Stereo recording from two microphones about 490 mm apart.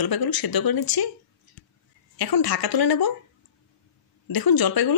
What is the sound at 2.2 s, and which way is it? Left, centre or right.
Speech, left.